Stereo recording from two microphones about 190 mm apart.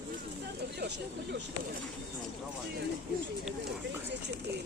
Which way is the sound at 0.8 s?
60° right (ahead or behind).